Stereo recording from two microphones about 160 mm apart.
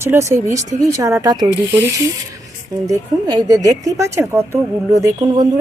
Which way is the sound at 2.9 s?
20° right (ahead or behind).